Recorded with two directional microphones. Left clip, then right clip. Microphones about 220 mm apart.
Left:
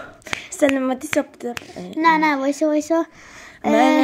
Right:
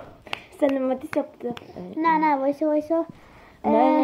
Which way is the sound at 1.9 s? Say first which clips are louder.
Left 4 dB; 50° left (ahead or behind).